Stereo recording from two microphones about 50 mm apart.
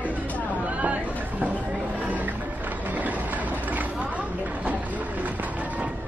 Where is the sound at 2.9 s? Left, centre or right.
Right.